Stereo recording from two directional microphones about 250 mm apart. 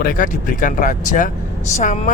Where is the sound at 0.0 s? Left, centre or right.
Left.